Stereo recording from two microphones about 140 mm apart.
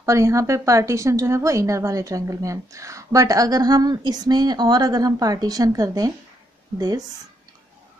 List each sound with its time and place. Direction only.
0.0 s a woman's voice: 20° right (ahead or behind)